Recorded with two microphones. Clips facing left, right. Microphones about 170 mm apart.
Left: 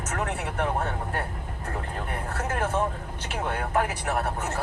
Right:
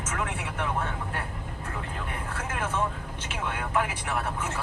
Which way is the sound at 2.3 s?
40° left (ahead or behind).